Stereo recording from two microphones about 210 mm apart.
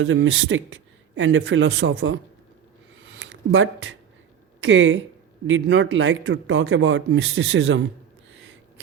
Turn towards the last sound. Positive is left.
turn(degrees=-65)  # may be behind; listen again after turning